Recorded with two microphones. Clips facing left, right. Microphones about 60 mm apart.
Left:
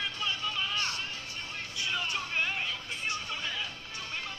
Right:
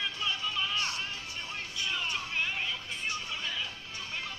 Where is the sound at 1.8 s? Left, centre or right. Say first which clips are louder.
Left 1 dB; centre.